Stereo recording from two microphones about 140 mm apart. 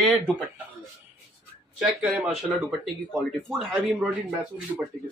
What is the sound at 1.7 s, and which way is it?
Speech, 5° right (ahead or behind).